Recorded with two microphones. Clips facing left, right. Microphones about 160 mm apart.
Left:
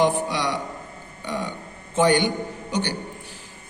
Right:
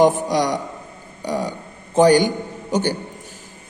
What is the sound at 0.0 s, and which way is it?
A man's voice, 45° right (ahead or behind).